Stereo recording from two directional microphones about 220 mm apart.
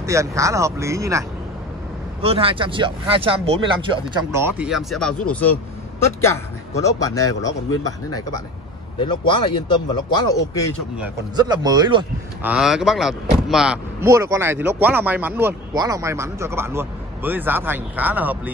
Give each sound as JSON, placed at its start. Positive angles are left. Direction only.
{"t": 0.0, "sound": "speech", "side_deg": -15}
{"t": 2.2, "sound": "a man's voice", "side_deg": -25}
{"t": 11.3, "sound": "speech", "side_deg": -20}
{"t": 12.4, "sound": "speech", "side_deg": 0}